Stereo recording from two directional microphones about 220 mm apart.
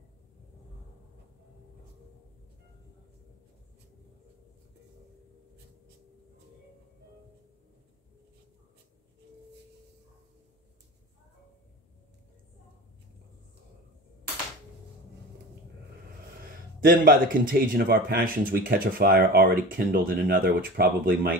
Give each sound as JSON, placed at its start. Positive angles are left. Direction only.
{"t": 16.3, "sound": "speech", "side_deg": -40}